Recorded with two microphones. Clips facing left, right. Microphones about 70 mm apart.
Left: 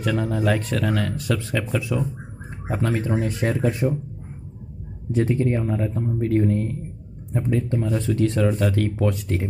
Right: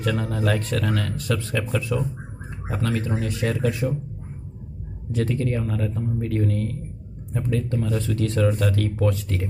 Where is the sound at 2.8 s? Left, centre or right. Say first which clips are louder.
Left 2 dB; left.